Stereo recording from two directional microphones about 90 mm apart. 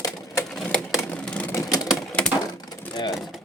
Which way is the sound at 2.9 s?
50° left (ahead or behind).